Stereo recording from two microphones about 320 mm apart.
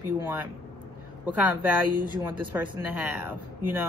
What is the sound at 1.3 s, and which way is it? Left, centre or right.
Speech, centre.